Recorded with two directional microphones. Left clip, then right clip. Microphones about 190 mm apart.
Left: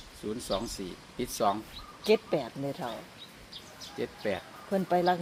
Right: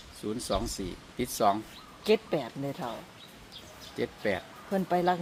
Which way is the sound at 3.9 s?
30° right (ahead or behind).